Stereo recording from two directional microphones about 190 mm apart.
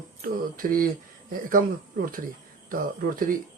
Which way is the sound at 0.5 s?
50° right (ahead or behind).